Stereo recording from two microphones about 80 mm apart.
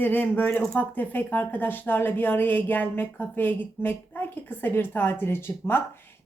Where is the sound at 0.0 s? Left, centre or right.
Left.